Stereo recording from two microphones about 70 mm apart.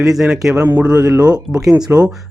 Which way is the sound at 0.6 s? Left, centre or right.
Right.